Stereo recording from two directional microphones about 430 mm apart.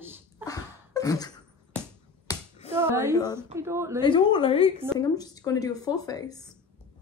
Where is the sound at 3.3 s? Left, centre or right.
Centre.